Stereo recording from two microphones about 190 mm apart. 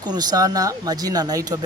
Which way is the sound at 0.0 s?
20° right (ahead or behind).